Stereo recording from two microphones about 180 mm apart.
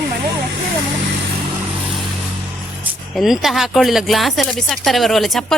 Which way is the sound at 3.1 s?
Centre (ahead or behind).